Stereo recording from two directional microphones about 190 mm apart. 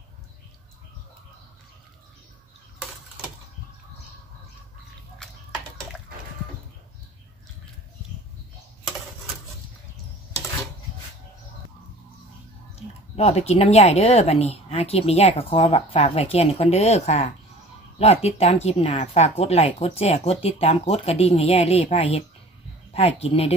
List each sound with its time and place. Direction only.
12.7 s speech: 35° left (ahead or behind)